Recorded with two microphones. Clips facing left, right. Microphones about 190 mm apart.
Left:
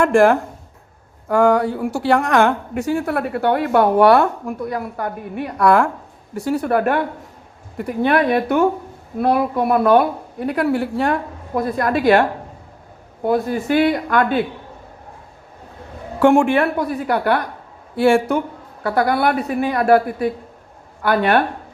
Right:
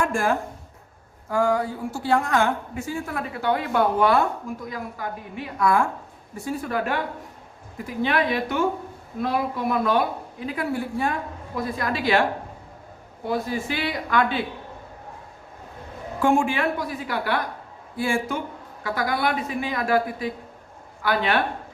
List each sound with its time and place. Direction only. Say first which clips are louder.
0.0 s a woman's voice: left 10 dB; 70° left (ahead or behind); by 12.2 s 55° left (ahead or behind)
13.2 s a man's voice: left 7 dB; 50° left (ahead or behind)
16.2 s speech: left 7 dB; 65° left (ahead or behind); by 17.4 s 50° left (ahead or behind)
17.9 s a man's voice: left 10 dB; 70° left (ahead or behind); by 21.4 s 50° left (ahead or behind)